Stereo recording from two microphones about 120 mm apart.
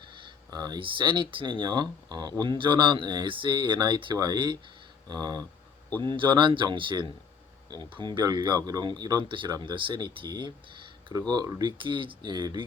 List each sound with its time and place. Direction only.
0.2 s speech: 35° right (ahead or behind)
11.8 s speech: 45° right (ahead or behind)